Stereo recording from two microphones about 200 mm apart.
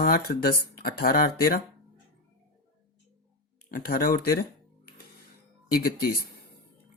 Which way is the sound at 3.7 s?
45° left (ahead or behind).